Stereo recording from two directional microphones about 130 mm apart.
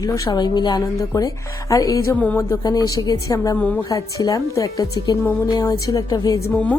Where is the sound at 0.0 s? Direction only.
25° left (ahead or behind).